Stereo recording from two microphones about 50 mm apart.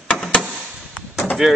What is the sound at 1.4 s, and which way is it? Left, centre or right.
Speech, centre.